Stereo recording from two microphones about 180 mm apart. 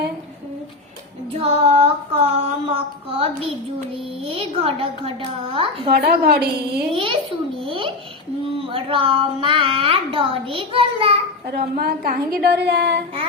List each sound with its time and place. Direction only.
1.4 s child singing: 35° right (ahead or behind)
3.8 s a child's voice: 30° right (ahead or behind)
5.9 s a woman's voice: 60° right (ahead or behind)
6.9 s a child's voice: 30° right (ahead or behind)
11.8 s a woman's voice: 55° right (ahead or behind)